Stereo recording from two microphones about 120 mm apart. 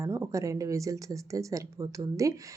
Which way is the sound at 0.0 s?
25° right (ahead or behind).